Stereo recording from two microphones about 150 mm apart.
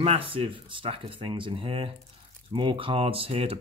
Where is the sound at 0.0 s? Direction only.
35° right (ahead or behind).